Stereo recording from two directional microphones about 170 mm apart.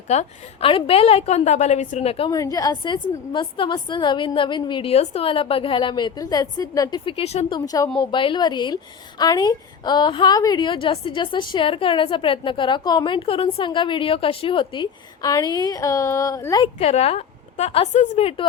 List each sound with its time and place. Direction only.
0.1 s a woman's voice: 35° left (ahead or behind)
2.3 s a woman's voice: 20° left (ahead or behind)
7.6 s a woman's voice: 20° left (ahead or behind)
16.7 s a woman's voice: 40° left (ahead or behind)